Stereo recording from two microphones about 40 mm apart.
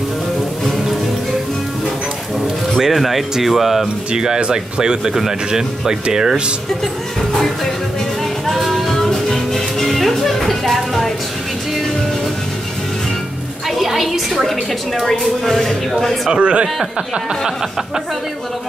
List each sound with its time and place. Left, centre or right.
2.8 s speech: centre
4.1 s speech: right
7.3 s music: centre
8.9 s music: centre
13.7 s a woman's voice: centre
16.3 s speech: right
17.3 s speech: centre